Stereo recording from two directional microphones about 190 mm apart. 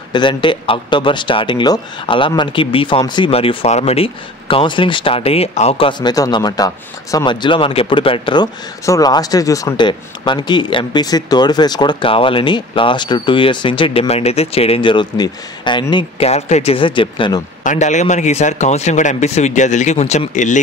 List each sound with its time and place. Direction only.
0.1 s speech: 25° left (ahead or behind)
17.6 s a man's voice: 40° left (ahead or behind)